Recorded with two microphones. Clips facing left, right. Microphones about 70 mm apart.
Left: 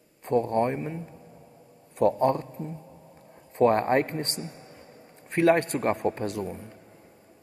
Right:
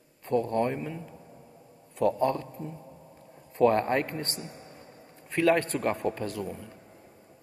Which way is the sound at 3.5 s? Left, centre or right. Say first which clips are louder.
Left 2 dB; left.